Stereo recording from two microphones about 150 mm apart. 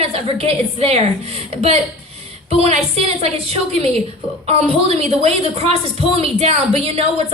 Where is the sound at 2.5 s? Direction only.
45° right (ahead or behind).